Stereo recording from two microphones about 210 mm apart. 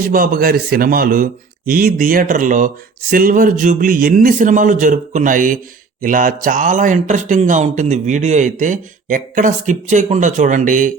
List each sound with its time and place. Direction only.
0.1 s speech: 40° right (ahead or behind)